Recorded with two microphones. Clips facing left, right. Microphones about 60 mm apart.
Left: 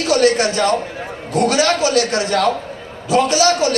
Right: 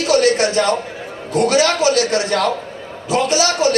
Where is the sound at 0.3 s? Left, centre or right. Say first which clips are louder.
Even; right.